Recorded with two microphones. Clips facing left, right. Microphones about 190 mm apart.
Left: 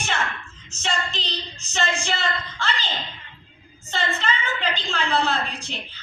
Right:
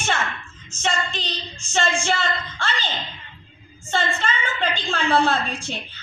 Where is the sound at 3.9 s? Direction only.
50° right (ahead or behind).